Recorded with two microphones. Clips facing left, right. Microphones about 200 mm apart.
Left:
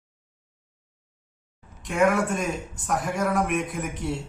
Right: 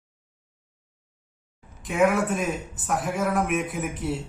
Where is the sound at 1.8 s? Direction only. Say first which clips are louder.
Even; centre (ahead or behind).